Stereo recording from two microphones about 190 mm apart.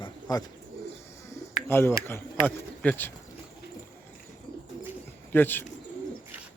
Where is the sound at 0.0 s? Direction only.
20° left (ahead or behind).